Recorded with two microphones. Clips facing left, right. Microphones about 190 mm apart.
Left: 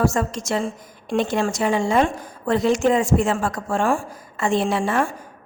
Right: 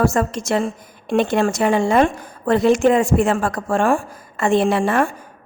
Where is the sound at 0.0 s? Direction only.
60° right (ahead or behind).